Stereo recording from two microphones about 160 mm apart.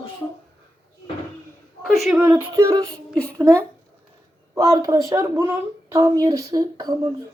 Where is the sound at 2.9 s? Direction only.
5° left (ahead or behind).